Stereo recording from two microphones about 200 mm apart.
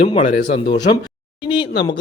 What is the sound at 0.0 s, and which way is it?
Speech, 25° left (ahead or behind).